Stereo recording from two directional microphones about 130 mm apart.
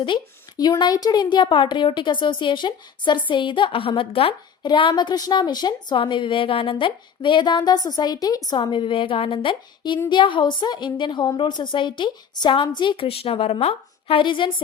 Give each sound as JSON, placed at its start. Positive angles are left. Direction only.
{"t": 0.0, "sound": "a woman's voice", "side_deg": 35}